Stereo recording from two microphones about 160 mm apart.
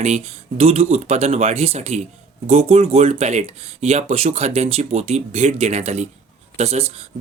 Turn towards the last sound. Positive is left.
turn(degrees=-40)  # may be behind; listen again after turning